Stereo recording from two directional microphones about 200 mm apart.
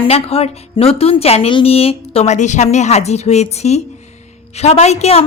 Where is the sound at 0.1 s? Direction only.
30° left (ahead or behind).